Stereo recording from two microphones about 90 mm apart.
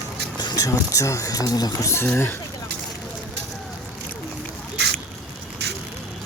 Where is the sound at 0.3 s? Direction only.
50° left (ahead or behind).